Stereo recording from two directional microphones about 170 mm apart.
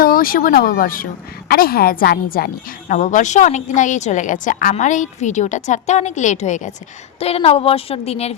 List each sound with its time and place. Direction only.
0.0 s a woman's voice: 55° left (ahead or behind)
2.9 s a woman's voice: 50° left (ahead or behind)